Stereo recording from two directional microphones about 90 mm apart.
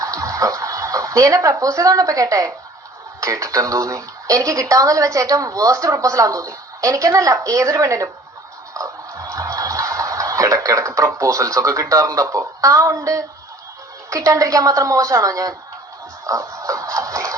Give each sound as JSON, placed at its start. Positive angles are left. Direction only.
{"t": 0.0, "sound": "speech", "side_deg": -40}
{"t": 8.7, "sound": "a sound", "side_deg": -40}
{"t": 14.1, "sound": "speech", "side_deg": -35}
{"t": 16.2, "sound": "music", "side_deg": -40}